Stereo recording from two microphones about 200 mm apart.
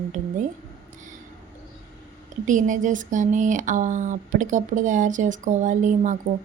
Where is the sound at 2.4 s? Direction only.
40° right (ahead or behind).